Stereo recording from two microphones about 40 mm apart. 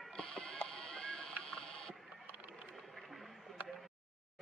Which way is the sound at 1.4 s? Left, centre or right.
Centre.